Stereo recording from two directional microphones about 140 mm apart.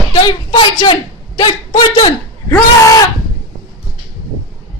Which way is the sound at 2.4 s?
25° left (ahead or behind).